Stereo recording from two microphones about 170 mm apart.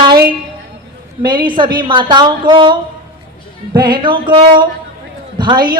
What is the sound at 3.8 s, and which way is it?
Speech, 30° right (ahead or behind).